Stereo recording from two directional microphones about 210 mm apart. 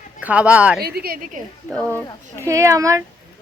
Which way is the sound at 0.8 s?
50° right (ahead or behind).